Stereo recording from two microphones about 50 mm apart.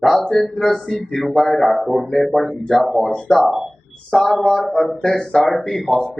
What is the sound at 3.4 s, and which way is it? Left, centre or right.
Speech, centre.